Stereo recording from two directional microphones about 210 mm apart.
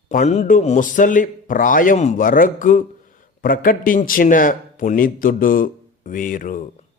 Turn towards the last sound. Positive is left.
turn(degrees=40)  # may be behind; listen again after turning